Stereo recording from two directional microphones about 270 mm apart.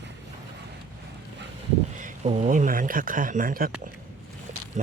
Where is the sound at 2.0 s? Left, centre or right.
Right.